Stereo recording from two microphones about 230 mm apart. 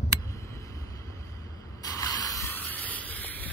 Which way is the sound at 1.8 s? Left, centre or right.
Centre.